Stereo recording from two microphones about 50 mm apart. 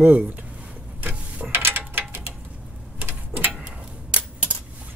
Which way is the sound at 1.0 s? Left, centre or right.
Right.